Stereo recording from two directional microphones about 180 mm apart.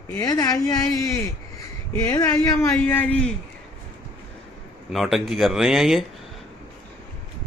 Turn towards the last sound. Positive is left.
turn(degrees=0)  # may be behind; listen again after turning